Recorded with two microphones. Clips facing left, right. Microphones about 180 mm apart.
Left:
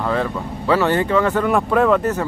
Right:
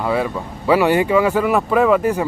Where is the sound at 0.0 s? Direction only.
10° right (ahead or behind).